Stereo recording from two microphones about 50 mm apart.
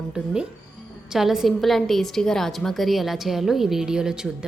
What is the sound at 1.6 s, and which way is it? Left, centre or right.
A woman's voice, centre.